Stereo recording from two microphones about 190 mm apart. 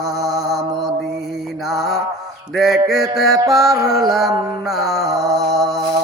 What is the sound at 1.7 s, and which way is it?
Music, centre (ahead or behind).